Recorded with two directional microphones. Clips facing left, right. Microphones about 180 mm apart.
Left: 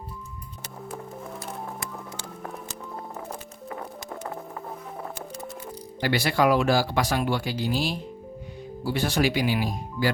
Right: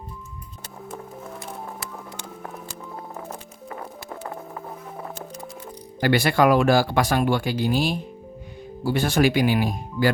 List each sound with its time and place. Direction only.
6.0 s speech: 55° right (ahead or behind)